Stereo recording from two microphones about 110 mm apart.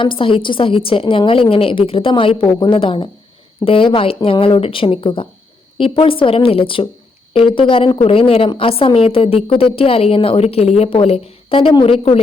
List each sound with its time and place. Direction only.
0.0 s a woman's voice: 50° left (ahead or behind)